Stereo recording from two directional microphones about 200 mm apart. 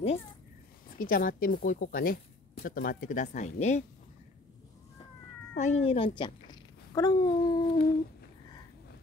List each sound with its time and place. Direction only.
0.9 s speech: 45° left (ahead or behind)
5.5 s speech: 35° left (ahead or behind)
5.9 s speech: 25° left (ahead or behind)